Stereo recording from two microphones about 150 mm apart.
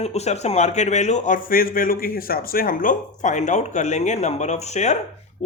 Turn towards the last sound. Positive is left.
turn(degrees=50)  # may be behind; listen again after turning